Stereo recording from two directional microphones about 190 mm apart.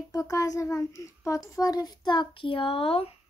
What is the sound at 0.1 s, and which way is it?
A child's voice, 15° left (ahead or behind).